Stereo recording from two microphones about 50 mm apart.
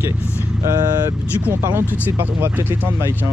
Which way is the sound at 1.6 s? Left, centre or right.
Right.